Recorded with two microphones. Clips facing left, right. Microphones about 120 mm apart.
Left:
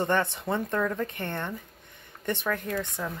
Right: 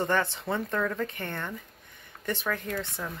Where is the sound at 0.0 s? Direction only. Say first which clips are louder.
Left 1 dB; 20° left (ahead or behind).